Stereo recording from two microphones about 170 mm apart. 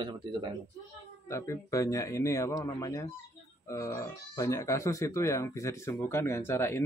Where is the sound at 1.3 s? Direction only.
20° left (ahead or behind).